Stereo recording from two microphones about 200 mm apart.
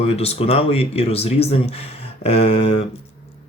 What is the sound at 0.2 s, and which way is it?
Speech, 30° left (ahead or behind).